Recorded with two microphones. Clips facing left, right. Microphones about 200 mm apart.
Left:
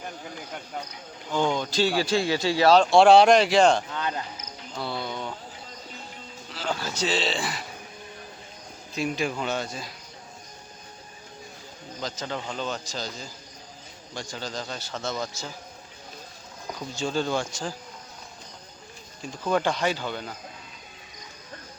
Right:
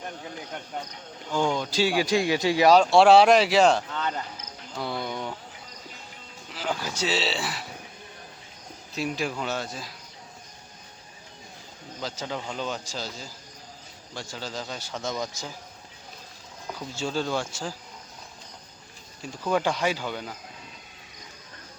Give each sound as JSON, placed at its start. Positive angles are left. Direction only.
{"t": 0.0, "sound": "cricket", "side_deg": 5}
{"t": 1.5, "sound": "a man's voice", "side_deg": -10}
{"t": 3.8, "sound": "insect", "side_deg": 10}
{"t": 4.8, "sound": "a sound", "side_deg": -15}
{"t": 6.5, "sound": "a man's voice", "side_deg": -15}
{"t": 9.0, "sound": "speech", "side_deg": 0}
{"t": 11.9, "sound": "a man's voice", "side_deg": -5}
{"t": 16.9, "sound": "a man's voice", "side_deg": -5}
{"t": 19.2, "sound": "a man's voice", "side_deg": -5}